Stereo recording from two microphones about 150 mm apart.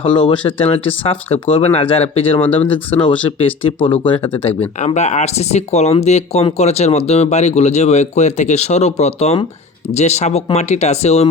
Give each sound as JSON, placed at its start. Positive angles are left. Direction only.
{"t": 0.0, "sound": "speech", "side_deg": 35}
{"t": 4.9, "sound": "speech", "side_deg": 50}